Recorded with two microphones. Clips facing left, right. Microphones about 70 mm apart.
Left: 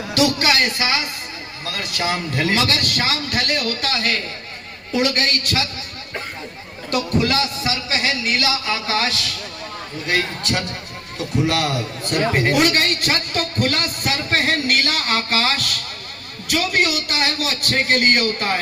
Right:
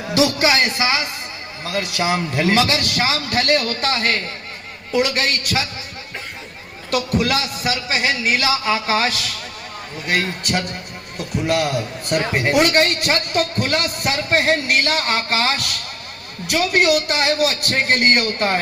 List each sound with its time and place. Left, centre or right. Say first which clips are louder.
0.1 s a man's voice: right 1 dB; centre
4.9 s a man's voice: right 1 dB; centre
6.9 s speech: even; centre
8.2 s a man's voice: right 2 dB; centre